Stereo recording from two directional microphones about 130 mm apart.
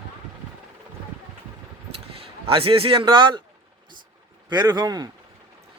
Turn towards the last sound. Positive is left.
turn(degrees=-30)  # may be behind; listen again after turning